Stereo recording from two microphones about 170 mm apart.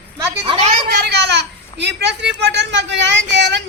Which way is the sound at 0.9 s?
70° right (ahead or behind).